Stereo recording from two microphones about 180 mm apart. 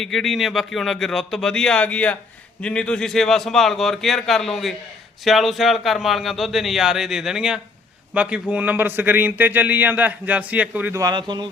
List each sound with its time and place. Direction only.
0.0 s a man's voice: centre (ahead or behind)
11.0 s speech: 25° right (ahead or behind)